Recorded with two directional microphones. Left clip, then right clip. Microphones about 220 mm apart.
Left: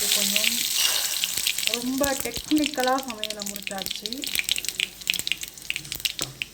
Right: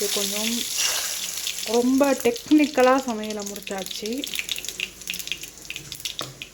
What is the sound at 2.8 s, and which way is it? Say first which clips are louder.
Speech: right 6 dB; 20° right (ahead or behind).